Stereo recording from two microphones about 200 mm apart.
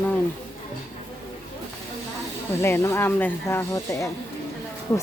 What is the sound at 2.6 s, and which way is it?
Speech, 15° left (ahead or behind).